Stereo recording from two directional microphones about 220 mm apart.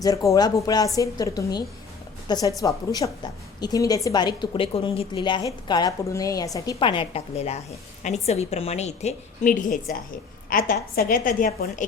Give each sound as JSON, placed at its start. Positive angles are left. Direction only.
{"t": 0.0, "sound": "a woman's voice", "side_deg": 15}